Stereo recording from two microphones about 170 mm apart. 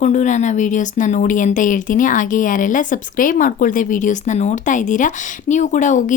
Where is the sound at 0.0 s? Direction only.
45° left (ahead or behind).